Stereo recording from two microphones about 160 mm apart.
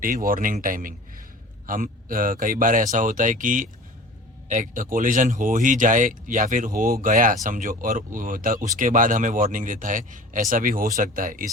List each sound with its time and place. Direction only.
0.0 s speech: 60° right (ahead or behind)